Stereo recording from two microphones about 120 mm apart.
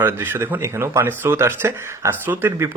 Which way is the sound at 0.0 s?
20° right (ahead or behind).